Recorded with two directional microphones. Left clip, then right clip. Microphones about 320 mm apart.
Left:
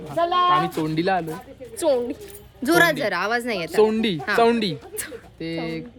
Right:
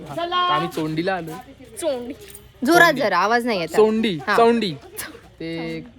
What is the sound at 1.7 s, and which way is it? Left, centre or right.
Speech, left.